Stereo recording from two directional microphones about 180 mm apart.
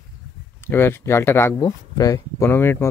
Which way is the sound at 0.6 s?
10° left (ahead or behind).